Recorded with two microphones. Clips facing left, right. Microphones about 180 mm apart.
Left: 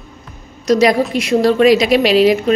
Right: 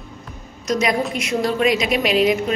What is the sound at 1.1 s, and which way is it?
Speech, 35° left (ahead or behind).